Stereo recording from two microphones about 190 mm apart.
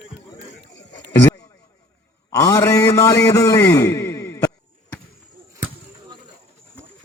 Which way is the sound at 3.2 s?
15° left (ahead or behind).